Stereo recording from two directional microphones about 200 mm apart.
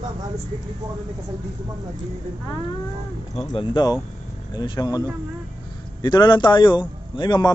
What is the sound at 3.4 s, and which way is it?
A man's voice, 20° left (ahead or behind).